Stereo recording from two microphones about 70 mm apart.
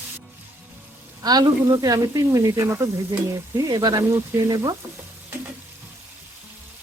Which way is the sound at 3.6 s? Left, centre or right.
Right.